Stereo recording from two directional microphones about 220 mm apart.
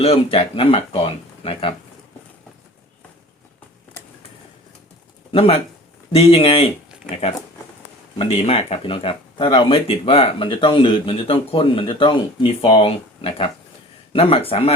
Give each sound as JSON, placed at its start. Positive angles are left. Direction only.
{"t": 0.0, "sound": "speech", "side_deg": 25}
{"t": 5.3, "sound": "speech", "side_deg": 25}
{"t": 8.2, "sound": "speech", "side_deg": 25}